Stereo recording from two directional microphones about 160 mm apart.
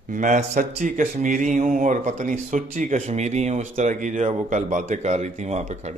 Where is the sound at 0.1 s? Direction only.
55° right (ahead or behind).